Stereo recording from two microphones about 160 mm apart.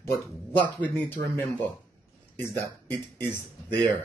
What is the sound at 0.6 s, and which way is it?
Speech, 10° left (ahead or behind).